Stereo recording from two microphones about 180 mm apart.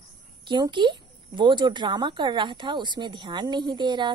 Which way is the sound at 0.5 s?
25° right (ahead or behind).